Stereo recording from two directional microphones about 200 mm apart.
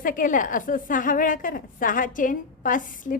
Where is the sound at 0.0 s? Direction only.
40° left (ahead or behind).